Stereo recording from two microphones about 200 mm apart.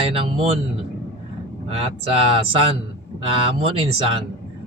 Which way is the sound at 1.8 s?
30° right (ahead or behind).